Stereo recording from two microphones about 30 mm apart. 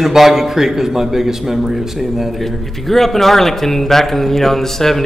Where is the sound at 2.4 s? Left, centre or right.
Centre.